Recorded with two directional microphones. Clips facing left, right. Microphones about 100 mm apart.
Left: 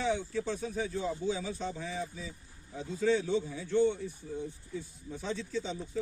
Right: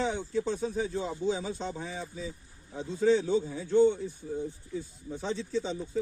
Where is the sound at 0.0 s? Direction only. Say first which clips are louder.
Right 2 dB; 25° right (ahead or behind).